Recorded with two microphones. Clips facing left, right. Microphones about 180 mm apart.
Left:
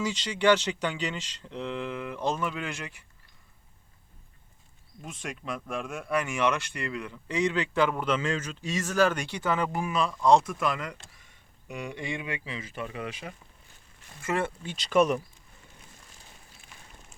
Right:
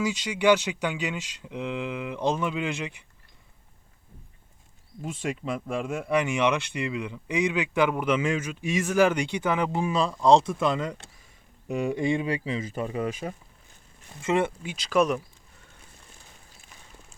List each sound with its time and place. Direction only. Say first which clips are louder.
0.0 s speech: right 2 dB; 10° right (ahead or behind)
5.0 s speech: right 6 dB; 30° right (ahead or behind)
11.7 s speech: right 10 dB; 35° right (ahead or behind)
14.2 s speech: right 5 dB; 20° right (ahead or behind)
14.8 s speech: even; centre (ahead or behind)